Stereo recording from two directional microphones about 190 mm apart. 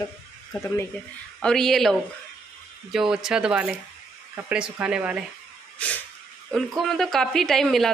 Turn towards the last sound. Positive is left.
turn(degrees=0)  # may be behind; listen again after turning